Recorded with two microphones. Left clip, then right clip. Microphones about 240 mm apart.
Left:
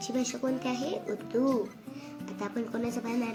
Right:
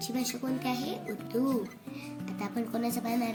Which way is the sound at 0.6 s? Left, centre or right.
Right.